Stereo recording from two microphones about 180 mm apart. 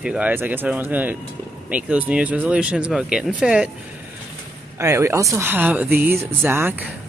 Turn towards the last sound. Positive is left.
turn(degrees=-10)  # may be behind; listen again after turning